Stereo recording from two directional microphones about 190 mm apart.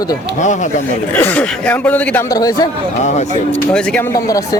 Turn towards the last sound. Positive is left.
turn(degrees=20)  # may be behind; listen again after turning